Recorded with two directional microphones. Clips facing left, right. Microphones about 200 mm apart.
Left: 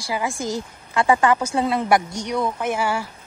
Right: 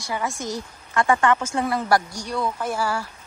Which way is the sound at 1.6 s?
20° left (ahead or behind).